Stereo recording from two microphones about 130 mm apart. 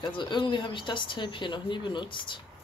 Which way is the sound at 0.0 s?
35° left (ahead or behind).